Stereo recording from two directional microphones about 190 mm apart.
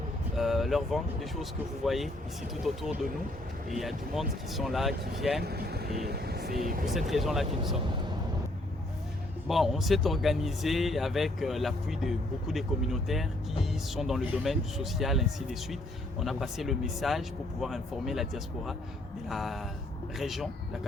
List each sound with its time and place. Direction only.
0.3 s speech: centre (ahead or behind)
5.4 s speech: 55° right (ahead or behind)
7.1 s speech: centre (ahead or behind)
9.5 s speech: centre (ahead or behind)